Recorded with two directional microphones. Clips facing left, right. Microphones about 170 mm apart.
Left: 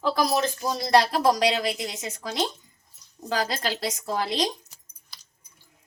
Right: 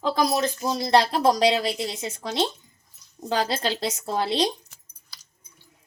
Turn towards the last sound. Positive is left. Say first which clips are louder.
# right 2 dB
turn(degrees=-30)  # may be behind; listen again after turning